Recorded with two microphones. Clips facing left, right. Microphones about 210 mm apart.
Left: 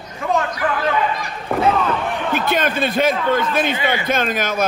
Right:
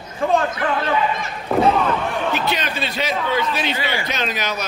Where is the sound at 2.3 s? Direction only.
50° left (ahead or behind).